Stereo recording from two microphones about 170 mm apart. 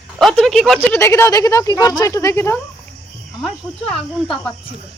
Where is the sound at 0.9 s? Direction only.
15° left (ahead or behind).